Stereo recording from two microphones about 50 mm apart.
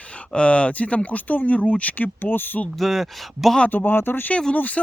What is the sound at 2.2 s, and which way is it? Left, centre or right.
Speech, left.